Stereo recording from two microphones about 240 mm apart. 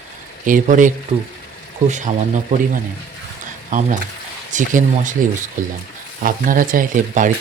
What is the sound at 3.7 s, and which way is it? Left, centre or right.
Speech, right.